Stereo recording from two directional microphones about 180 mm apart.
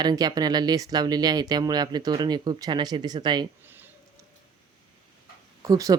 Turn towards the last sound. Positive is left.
turn(degrees=-20)  # may be behind; listen again after turning